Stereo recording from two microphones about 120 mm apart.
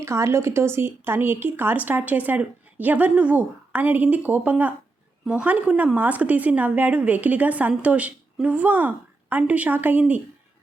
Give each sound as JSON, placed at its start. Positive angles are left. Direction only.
{"t": 0.0, "sound": "a woman's voice", "side_deg": -25}